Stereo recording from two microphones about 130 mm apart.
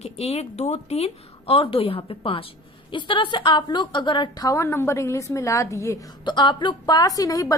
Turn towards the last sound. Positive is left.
turn(degrees=30)  # may be behind; listen again after turning